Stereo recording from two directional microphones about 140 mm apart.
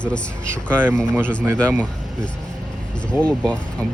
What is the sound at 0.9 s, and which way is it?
Speech, 5° left (ahead or behind).